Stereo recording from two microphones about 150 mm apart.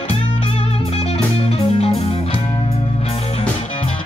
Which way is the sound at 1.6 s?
40° left (ahead or behind).